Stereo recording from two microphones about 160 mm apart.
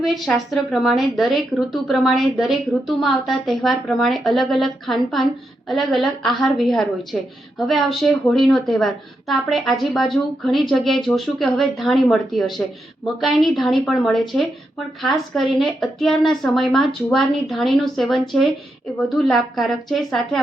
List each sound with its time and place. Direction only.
0.0 s a woman's voice: centre (ahead or behind)